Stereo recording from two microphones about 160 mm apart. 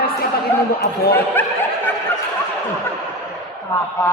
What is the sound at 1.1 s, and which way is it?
Snicker, 10° left (ahead or behind).